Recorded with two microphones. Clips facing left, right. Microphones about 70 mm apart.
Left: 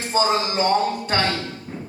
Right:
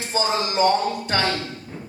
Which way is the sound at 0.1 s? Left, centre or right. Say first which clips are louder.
Left 3 dB; left.